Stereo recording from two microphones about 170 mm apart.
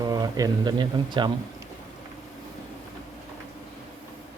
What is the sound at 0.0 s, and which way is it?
Speech, 20° right (ahead or behind).